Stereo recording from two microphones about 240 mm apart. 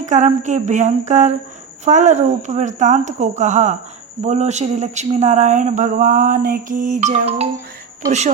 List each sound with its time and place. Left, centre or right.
0.0 s speech: right